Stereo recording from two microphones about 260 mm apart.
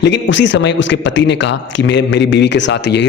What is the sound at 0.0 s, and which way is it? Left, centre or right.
A man's voice, left.